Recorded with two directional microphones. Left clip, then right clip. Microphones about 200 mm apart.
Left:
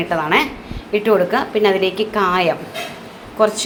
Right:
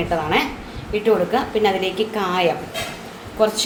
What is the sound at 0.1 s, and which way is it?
A woman's voice, 20° left (ahead or behind).